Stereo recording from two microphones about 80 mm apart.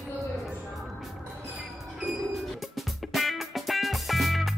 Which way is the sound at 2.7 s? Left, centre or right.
Centre.